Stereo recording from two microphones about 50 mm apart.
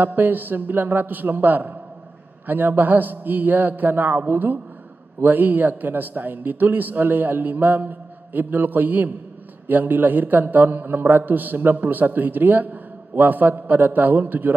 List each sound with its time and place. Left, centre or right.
0.0 s a man's voice: right